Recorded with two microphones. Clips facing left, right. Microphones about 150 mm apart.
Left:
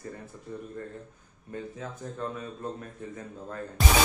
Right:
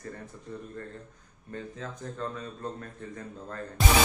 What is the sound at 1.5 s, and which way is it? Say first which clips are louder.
A man's voice: left 1 dB; 10° left (ahead or behind).